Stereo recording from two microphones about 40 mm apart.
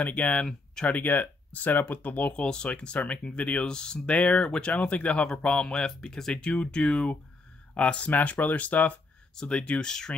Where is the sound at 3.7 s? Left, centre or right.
Left.